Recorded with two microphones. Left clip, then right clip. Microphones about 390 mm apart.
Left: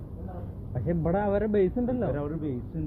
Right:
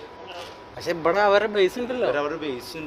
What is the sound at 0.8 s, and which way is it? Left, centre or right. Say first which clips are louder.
Speech: right 8 dB; right.